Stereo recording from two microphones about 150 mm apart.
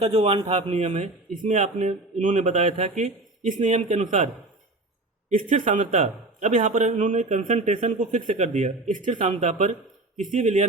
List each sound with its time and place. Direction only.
0.0 s a man's voice: 40° right (ahead or behind)
5.3 s a man's voice: 55° right (ahead or behind)